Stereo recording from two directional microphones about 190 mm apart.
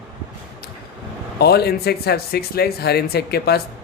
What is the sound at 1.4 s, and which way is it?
Speech, 55° left (ahead or behind).